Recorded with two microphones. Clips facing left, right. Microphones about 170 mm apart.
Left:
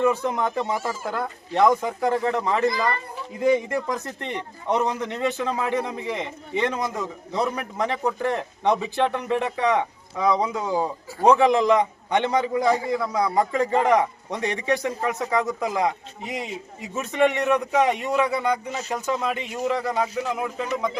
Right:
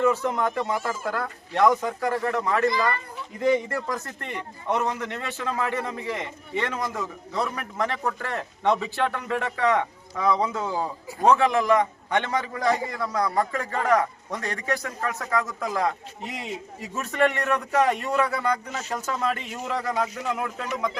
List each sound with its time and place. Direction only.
0.0 s a man's voice: 15° left (ahead or behind)